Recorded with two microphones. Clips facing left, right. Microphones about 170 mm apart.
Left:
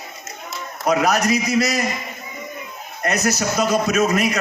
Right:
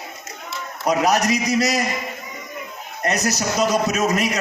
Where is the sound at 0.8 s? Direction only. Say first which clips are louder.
Even; 35° right (ahead or behind).